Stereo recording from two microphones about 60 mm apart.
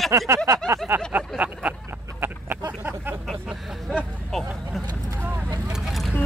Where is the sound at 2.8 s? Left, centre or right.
Right.